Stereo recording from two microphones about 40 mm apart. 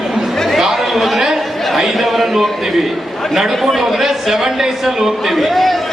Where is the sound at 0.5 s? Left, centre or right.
Centre.